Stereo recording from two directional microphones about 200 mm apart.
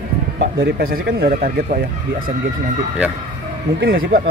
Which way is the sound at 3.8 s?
50° right (ahead or behind).